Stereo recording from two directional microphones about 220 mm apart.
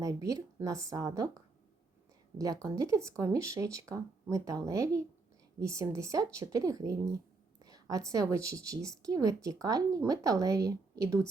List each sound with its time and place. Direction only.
0.0 s a woman's voice: 15° right (ahead or behind)
2.6 s a woman's voice: 15° right (ahead or behind)